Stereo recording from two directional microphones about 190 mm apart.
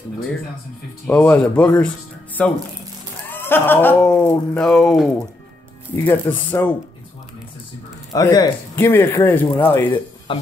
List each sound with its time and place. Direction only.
1.0 s speech: 5° left (ahead or behind)
5.9 s speech: 10° left (ahead or behind)
8.1 s speech: 20° left (ahead or behind)
10.3 s speech: 25° left (ahead or behind)